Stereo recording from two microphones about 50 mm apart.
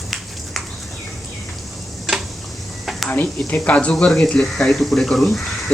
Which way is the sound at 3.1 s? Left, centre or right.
Left.